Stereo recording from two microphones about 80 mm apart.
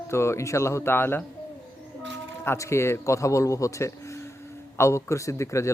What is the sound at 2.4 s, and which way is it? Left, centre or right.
A man's voice, left.